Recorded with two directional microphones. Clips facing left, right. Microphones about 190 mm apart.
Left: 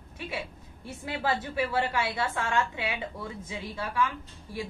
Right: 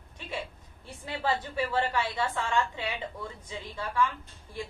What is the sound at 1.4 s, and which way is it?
A woman's voice, 10° left (ahead or behind).